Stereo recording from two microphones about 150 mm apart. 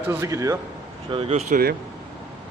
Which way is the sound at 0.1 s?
20° right (ahead or behind).